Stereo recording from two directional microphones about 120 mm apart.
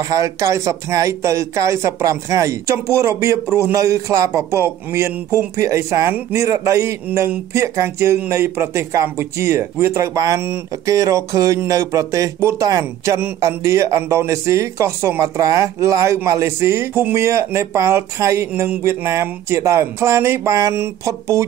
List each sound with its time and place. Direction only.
0.0 s speech: 30° right (ahead or behind)